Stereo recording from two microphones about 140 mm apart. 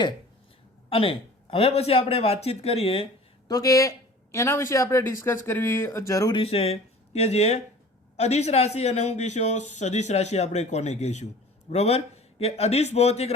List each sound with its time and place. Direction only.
0.9 s speech: 40° left (ahead or behind)
3.5 s speech: 25° left (ahead or behind)
6.3 s speech: 45° left (ahead or behind)